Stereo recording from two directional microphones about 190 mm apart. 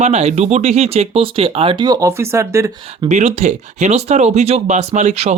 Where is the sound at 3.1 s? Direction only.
35° right (ahead or behind).